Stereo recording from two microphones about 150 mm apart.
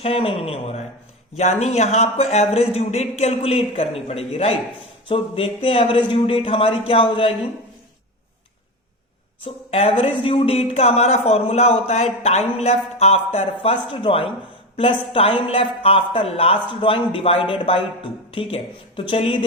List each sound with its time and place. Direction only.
0.0 s a woman's voice: 40° left (ahead or behind)
9.4 s a woman's voice: 40° left (ahead or behind)